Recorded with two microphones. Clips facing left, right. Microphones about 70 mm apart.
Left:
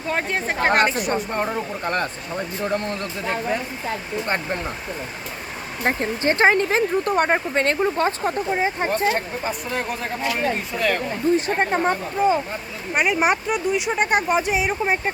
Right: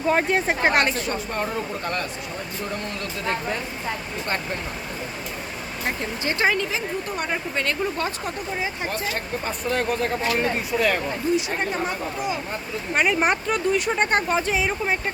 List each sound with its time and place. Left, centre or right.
0.1 s speech: centre
0.9 s speech: centre
2.7 s speech: left
5.8 s speech: left
9.4 s speech: centre
11.3 s speech: left
12.9 s speech: centre